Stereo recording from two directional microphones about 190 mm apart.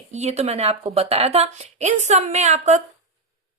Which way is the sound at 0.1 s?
35° right (ahead or behind).